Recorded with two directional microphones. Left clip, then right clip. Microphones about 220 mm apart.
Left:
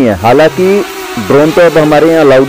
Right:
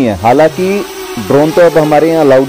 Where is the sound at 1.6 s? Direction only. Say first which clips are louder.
Even; 15° right (ahead or behind).